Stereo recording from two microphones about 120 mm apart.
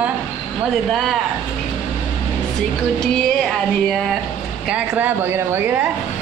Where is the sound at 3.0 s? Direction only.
5° left (ahead or behind).